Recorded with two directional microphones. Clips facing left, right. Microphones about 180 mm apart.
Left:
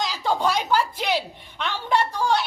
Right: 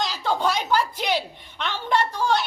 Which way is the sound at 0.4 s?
10° left (ahead or behind).